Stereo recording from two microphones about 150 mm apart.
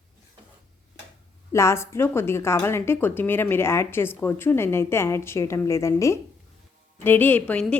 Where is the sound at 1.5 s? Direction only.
20° left (ahead or behind).